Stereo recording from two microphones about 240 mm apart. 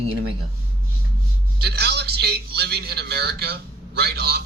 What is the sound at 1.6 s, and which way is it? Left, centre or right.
A man's voice, right.